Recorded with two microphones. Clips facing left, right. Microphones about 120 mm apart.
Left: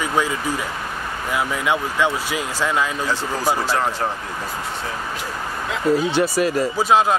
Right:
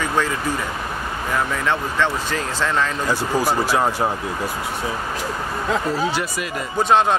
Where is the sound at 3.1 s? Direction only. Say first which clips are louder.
Right 2 dB; 10° right (ahead or behind).